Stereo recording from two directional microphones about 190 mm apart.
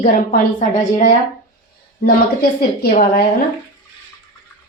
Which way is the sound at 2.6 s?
50° left (ahead or behind).